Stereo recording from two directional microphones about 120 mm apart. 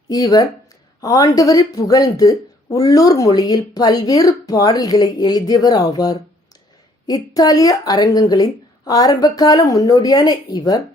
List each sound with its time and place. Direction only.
0.1 s a woman's voice: 30° left (ahead or behind)